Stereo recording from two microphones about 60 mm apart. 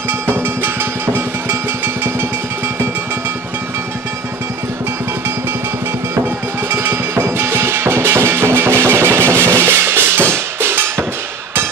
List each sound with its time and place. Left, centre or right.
0.3 s music: right
6.7 s music: right